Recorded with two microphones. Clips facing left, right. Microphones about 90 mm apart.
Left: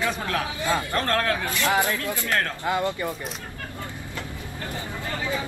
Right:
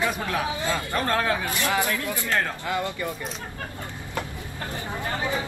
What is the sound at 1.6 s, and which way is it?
Speech, 20° left (ahead or behind).